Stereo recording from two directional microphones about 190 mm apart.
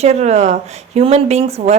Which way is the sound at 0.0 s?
35° right (ahead or behind).